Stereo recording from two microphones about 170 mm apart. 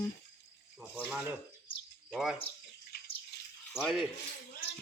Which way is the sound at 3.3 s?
75° left (ahead or behind).